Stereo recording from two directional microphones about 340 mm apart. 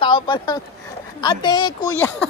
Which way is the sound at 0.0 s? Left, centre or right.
Centre.